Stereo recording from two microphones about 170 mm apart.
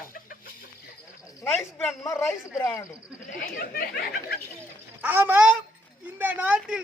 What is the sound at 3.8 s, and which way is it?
Speech, 65° left (ahead or behind).